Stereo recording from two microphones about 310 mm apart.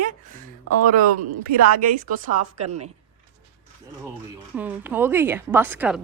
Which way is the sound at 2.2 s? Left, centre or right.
Right.